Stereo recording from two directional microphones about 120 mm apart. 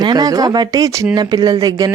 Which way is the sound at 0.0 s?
35° right (ahead or behind).